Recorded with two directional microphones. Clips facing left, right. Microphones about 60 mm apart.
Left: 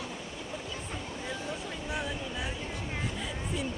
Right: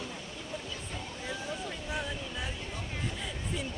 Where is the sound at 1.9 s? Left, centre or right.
Centre.